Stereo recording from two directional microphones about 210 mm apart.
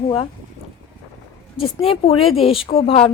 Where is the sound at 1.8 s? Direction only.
25° left (ahead or behind).